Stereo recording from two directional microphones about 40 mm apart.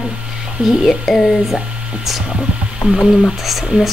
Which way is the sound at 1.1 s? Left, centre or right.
Centre.